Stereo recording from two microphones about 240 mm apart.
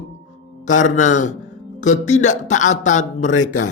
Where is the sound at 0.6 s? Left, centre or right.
Left.